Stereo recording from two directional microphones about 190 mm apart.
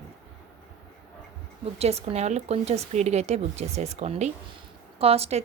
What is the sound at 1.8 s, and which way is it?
Speech, 35° right (ahead or behind).